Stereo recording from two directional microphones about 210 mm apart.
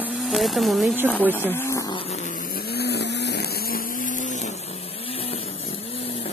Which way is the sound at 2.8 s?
55° left (ahead or behind).